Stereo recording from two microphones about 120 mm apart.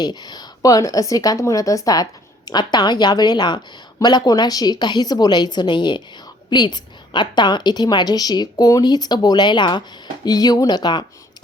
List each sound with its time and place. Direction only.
0.0 s a woman's voice: 35° left (ahead or behind)